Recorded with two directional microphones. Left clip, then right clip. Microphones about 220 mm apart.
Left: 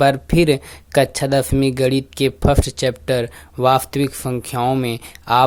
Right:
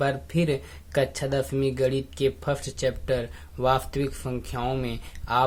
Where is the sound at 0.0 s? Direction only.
35° left (ahead or behind).